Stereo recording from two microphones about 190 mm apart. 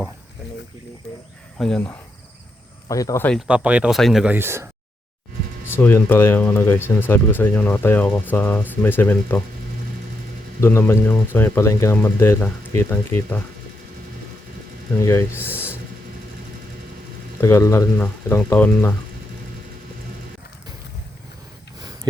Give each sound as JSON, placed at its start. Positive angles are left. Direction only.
{"t": 1.5, "sound": "speech", "side_deg": 5}
{"t": 2.9, "sound": "speech", "side_deg": 15}
{"t": 3.3, "sound": "speech", "side_deg": -5}
{"t": 5.6, "sound": "speech", "side_deg": 10}
{"t": 10.6, "sound": "speech", "side_deg": 15}
{"t": 14.9, "sound": "speech", "side_deg": 15}
{"t": 17.4, "sound": "speech", "side_deg": 15}